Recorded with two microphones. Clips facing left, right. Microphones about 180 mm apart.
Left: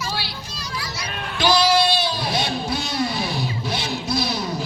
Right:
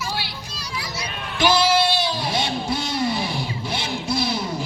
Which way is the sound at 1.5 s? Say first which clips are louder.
Left 1 dB; 25° right (ahead or behind).